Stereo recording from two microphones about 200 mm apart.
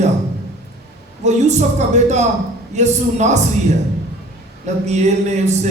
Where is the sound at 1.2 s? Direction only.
35° right (ahead or behind).